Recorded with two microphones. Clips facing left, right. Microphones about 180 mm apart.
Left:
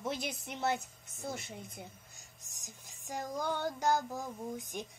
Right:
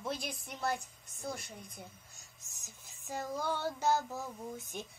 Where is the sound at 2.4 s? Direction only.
15° left (ahead or behind).